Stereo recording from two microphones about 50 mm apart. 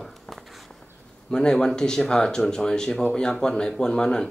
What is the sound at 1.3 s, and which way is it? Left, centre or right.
Speech, centre.